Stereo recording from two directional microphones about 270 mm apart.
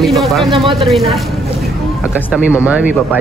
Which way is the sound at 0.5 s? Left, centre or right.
Right.